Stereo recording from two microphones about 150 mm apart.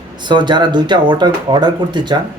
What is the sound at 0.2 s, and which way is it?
Speech, 30° right (ahead or behind).